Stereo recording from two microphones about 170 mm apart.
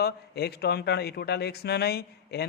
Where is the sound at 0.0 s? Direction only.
70° left (ahead or behind).